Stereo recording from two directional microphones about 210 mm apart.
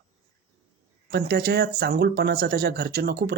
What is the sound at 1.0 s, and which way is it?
Speech, 50° right (ahead or behind).